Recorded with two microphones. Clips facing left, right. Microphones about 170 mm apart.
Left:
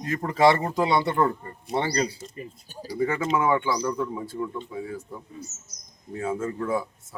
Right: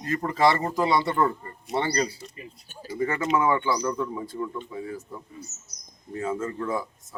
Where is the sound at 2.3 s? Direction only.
35° left (ahead or behind).